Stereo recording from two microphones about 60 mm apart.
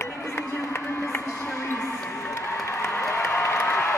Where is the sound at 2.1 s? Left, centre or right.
Left.